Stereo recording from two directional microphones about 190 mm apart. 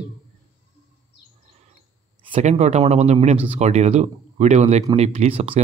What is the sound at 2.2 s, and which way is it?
Speech, 30° right (ahead or behind).